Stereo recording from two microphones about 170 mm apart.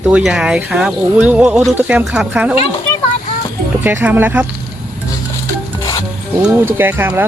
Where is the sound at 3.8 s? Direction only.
10° right (ahead or behind).